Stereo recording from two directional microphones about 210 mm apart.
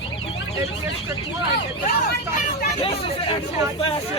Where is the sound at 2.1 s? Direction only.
45° left (ahead or behind).